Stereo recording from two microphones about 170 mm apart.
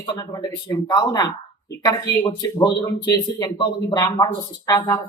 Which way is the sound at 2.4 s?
20° left (ahead or behind).